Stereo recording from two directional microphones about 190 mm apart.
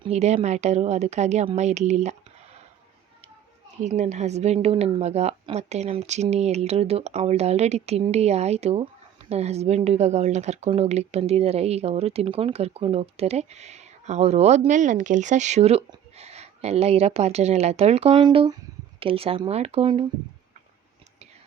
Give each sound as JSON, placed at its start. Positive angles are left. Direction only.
{"t": 0.0, "sound": "a woman's voice", "side_deg": -35}
{"t": 3.8, "sound": "a woman's voice", "side_deg": -35}